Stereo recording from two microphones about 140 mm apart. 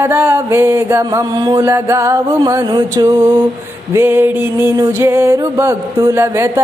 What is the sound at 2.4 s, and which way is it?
Music, 30° right (ahead or behind).